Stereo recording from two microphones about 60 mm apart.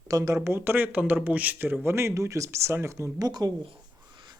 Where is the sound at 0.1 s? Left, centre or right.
Right.